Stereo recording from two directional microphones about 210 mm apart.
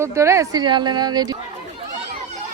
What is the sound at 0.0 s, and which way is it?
Speech, 15° right (ahead or behind).